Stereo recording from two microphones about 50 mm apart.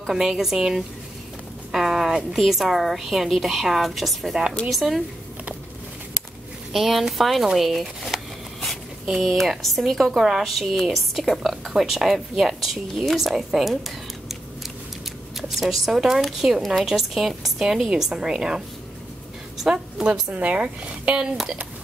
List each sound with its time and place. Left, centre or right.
0.0 s a woman's voice: centre
6.7 s a woman's voice: centre
15.5 s a woman's voice: centre
19.6 s a woman's voice: centre
20.3 s speech: right
21.2 s a woman's voice: centre